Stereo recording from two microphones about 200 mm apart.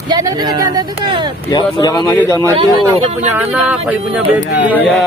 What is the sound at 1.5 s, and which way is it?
Speech, 20° left (ahead or behind).